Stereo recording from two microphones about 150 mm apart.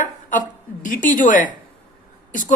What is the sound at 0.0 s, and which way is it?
Speech, 60° left (ahead or behind).